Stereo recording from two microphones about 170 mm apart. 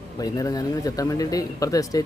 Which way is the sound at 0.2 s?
20° left (ahead or behind).